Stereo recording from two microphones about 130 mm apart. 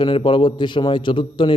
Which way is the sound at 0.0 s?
40° left (ahead or behind).